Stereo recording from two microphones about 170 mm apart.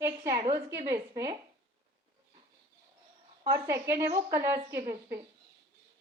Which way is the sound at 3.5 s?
15° right (ahead or behind).